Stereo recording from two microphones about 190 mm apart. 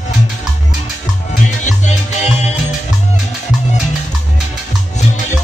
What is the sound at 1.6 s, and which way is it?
Music, 40° left (ahead or behind).